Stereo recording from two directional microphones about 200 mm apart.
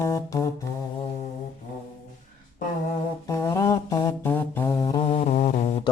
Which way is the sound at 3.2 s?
15° left (ahead or behind).